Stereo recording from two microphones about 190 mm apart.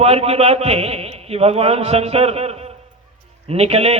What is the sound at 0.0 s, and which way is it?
A man's voice, 30° right (ahead or behind).